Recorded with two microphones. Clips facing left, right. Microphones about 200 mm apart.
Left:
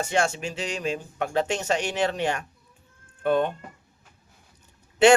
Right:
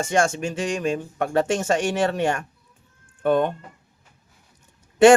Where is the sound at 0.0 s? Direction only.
45° right (ahead or behind).